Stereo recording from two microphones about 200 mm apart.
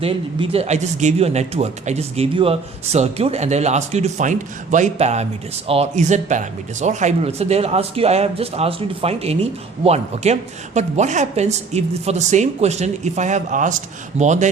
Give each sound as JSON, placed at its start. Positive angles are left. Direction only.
{"t": 0.0, "sound": "speech", "side_deg": -25}